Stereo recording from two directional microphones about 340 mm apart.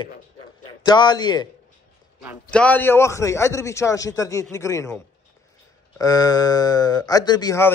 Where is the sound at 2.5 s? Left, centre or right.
Centre.